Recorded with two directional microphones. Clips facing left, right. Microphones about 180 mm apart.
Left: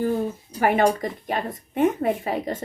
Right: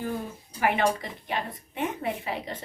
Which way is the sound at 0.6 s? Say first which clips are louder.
Left 5 dB; 45° left (ahead or behind).